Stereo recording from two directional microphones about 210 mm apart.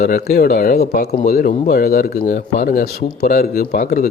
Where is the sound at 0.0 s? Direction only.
45° left (ahead or behind).